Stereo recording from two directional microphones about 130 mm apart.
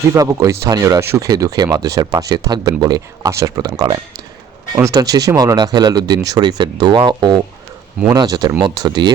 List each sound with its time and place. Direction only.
0.1 s speech: 25° right (ahead or behind)